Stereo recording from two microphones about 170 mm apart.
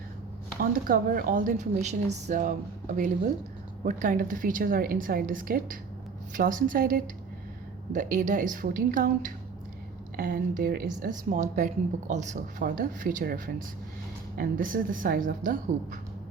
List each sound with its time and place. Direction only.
0.6 s speech: 55° right (ahead or behind)